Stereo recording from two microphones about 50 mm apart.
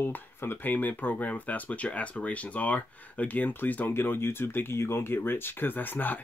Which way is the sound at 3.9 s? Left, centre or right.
Left.